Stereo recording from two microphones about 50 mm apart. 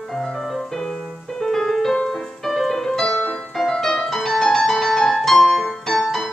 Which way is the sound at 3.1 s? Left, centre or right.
Left.